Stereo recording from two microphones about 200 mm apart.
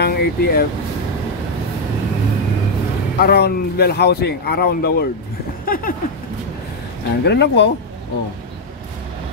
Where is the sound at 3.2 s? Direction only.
50° left (ahead or behind).